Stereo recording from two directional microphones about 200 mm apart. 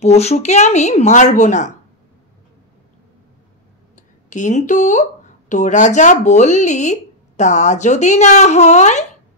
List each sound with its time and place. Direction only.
0.0 s speech: 35° left (ahead or behind)
3.9 s a sound: 40° left (ahead or behind)
5.5 s speech: 35° left (ahead or behind)